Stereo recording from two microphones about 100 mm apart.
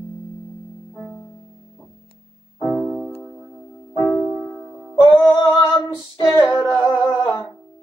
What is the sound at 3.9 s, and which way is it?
Music, 35° left (ahead or behind).